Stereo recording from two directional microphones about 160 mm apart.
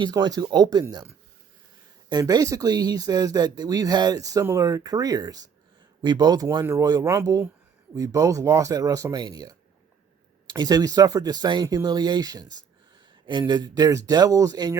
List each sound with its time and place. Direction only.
0.0 s speech: 25° right (ahead or behind)